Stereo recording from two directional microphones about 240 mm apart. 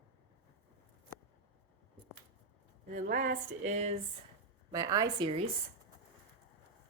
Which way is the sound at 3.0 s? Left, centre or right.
Right.